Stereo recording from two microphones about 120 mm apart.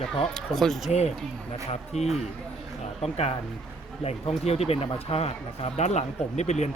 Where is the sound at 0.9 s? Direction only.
65° left (ahead or behind).